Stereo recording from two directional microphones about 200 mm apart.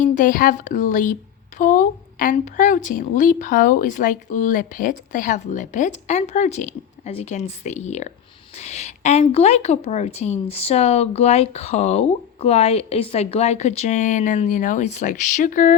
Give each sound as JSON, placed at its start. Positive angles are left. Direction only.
{"t": 0.0, "sound": "speech", "side_deg": 40}